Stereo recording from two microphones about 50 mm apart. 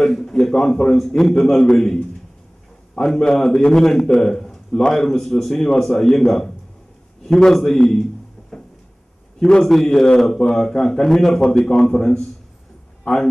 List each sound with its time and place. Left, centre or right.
0.0 s a sound: centre
0.9 s a man's voice: centre
3.0 s a man's voice: centre
7.5 s a sound: centre
9.4 s a man's voice: centre
13.0 s a man's voice: left